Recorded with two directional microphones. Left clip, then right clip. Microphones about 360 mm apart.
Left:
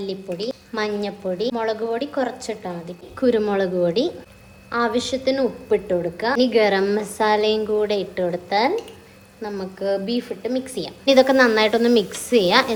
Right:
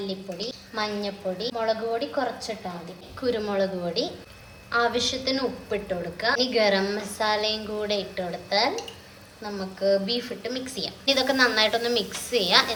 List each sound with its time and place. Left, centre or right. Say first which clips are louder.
0.1 s a woman's voice: left 6 dB; left